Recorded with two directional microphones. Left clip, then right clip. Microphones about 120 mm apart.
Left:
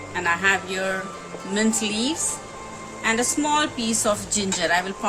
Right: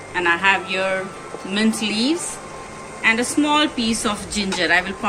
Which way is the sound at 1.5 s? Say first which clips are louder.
Right 2 dB; 70° left (ahead or behind).